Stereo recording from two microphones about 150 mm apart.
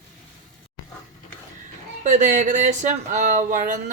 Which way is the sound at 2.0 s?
55° right (ahead or behind).